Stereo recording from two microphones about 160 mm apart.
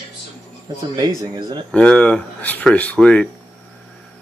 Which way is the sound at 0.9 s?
25° right (ahead or behind).